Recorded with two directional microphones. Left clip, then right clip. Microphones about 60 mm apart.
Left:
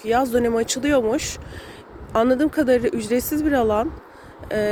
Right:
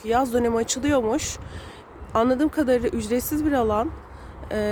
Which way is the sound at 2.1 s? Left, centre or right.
Right.